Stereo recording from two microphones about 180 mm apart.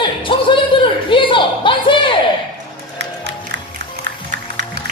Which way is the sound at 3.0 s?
70° right (ahead or behind).